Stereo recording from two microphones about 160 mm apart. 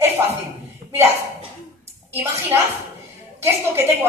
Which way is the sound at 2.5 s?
15° right (ahead or behind).